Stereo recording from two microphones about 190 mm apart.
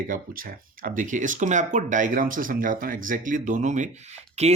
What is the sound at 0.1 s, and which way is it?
Speech, 45° right (ahead or behind).